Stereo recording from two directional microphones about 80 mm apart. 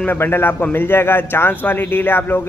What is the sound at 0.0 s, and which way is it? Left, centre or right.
A man's voice, left.